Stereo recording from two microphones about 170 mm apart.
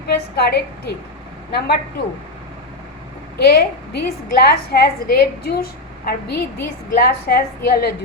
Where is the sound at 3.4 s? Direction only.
65° left (ahead or behind).